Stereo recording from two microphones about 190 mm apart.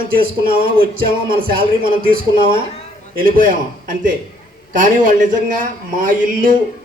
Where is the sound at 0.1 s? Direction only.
50° right (ahead or behind).